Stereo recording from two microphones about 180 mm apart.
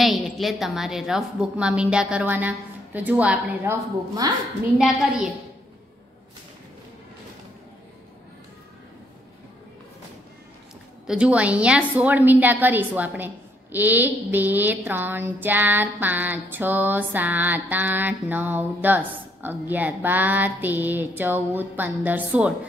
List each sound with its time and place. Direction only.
0.0 s a woman's voice: centre (ahead or behind)
4.2 s a woman's voice: 20° right (ahead or behind)
4.7 s a woman's voice: centre (ahead or behind)
11.1 s a woman's voice: 5° right (ahead or behind)